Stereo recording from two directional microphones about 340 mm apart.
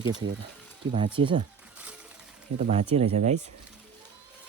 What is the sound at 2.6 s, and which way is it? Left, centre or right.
Speech, centre.